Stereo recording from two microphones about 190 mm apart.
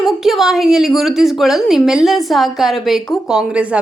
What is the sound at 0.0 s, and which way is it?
A woman's voice, centre (ahead or behind).